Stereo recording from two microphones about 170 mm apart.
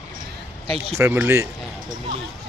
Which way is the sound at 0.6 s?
35° right (ahead or behind).